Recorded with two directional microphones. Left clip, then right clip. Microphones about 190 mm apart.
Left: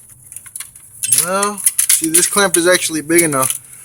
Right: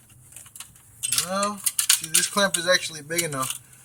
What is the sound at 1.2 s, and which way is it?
Keys jangling, 60° left (ahead or behind).